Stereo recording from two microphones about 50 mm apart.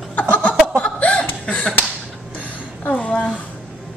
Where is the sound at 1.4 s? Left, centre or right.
Left.